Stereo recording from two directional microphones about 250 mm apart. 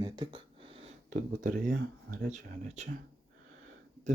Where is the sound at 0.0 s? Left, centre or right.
Centre.